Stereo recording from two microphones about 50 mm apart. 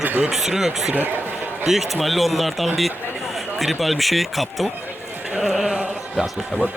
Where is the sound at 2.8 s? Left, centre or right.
Centre.